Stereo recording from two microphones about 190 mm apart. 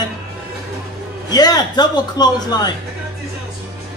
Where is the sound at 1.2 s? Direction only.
20° left (ahead or behind).